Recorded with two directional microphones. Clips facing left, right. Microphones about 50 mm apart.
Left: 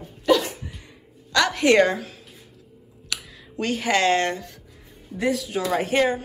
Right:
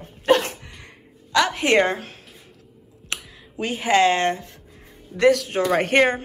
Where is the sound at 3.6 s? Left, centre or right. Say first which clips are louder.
Right 3 dB; centre.